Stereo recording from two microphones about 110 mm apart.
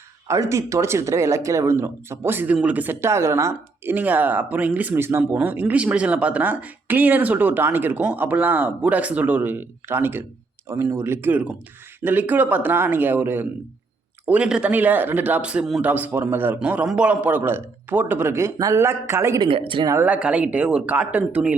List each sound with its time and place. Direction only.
0.3 s a man's voice: 25° right (ahead or behind); by 15.8 s 5° right (ahead or behind)
15.8 s a man's voice: 15° right (ahead or behind)
19.4 s speech: 50° right (ahead or behind)
20.0 s speech: 15° right (ahead or behind)